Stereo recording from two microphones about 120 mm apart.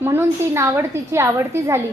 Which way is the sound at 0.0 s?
20° right (ahead or behind).